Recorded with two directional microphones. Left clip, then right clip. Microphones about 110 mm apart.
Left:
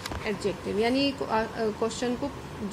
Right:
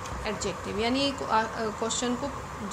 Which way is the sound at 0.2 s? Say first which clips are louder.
Left 2 dB; 20° left (ahead or behind).